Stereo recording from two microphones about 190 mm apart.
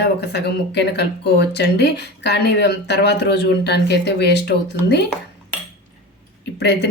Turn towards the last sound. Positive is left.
turn(degrees=65)  # may be behind; listen again after turning